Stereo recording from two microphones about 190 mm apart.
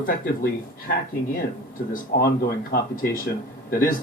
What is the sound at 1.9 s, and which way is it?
Speech, 55° left (ahead or behind).